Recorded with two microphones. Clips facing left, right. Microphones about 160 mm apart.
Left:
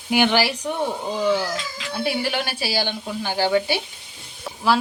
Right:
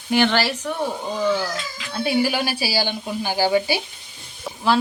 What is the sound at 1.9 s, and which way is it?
Speech, centre (ahead or behind).